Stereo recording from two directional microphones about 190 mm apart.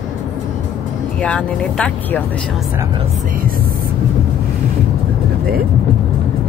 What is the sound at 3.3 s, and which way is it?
Speech, 50° right (ahead or behind).